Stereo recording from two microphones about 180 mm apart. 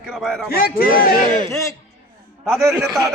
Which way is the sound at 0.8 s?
55° left (ahead or behind).